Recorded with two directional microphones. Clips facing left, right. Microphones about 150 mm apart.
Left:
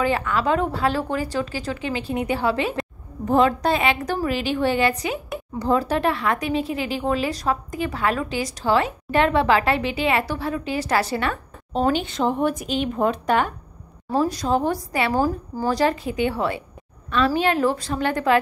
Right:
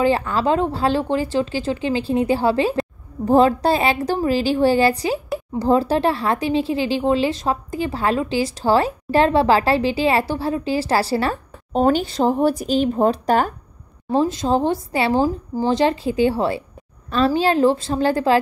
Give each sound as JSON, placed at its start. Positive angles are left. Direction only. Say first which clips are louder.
{"t": 0.0, "sound": "speech", "louder": "right 3 dB", "side_deg": -30}
{"t": 14.1, "sound": "speech", "louder": "right 3 dB", "side_deg": -25}